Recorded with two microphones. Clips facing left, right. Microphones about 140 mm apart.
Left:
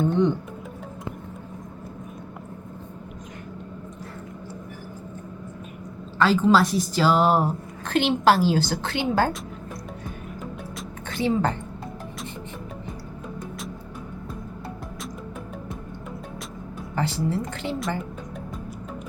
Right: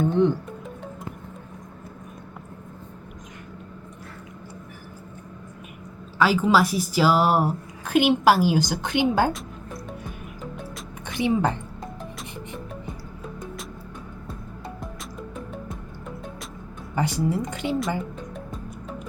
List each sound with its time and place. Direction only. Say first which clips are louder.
0.0 s speech: right 1 dB; 5° right (ahead or behind)
6.1 s a woman's voice: left 1 dB; 10° right (ahead or behind)
11.1 s a woman's voice: right 1 dB; 15° right (ahead or behind)
16.9 s a woman's voice: right 1 dB; 15° right (ahead or behind)